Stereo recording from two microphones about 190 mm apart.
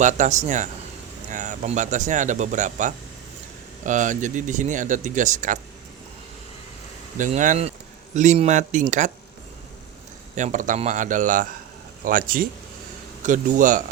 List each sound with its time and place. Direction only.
0.0 s speech: 40° right (ahead or behind)
7.2 s speech: 40° right (ahead or behind)
10.3 s speech: 40° right (ahead or behind)